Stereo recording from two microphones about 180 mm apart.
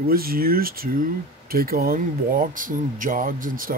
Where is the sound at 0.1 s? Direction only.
55° right (ahead or behind).